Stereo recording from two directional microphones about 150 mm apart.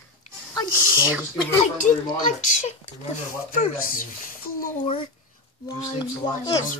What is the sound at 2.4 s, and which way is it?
Speech, 55° left (ahead or behind).